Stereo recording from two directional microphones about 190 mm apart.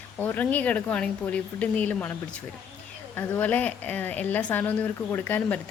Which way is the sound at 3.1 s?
10° left (ahead or behind).